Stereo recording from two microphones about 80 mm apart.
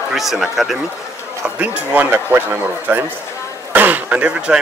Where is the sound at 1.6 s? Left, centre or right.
Centre.